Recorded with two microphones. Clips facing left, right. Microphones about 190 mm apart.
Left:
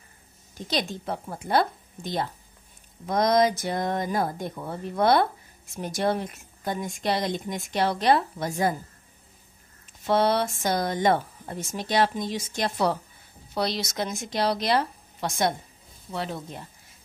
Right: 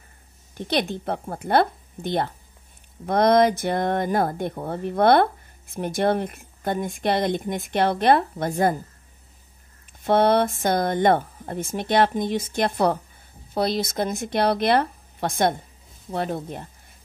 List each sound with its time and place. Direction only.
0.6 s speech: 60° right (ahead or behind)
10.0 s speech: 55° right (ahead or behind)